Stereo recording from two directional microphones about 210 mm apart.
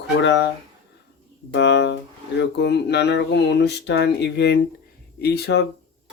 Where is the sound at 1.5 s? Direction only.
55° left (ahead or behind).